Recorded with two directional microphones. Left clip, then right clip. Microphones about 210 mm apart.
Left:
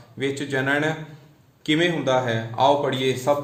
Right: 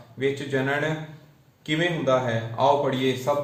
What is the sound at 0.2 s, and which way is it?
Speech, 55° left (ahead or behind).